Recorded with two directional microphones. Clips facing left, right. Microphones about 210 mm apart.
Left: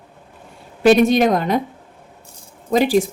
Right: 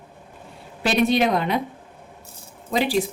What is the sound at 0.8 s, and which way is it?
Speech, 45° left (ahead or behind).